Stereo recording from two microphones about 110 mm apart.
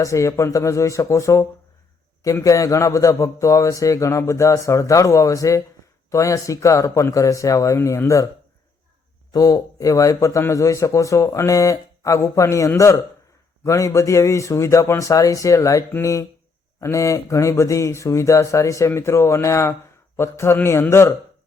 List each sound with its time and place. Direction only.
0.0 s a man's voice: 30° left (ahead or behind)
9.3 s a man's voice: 35° left (ahead or behind)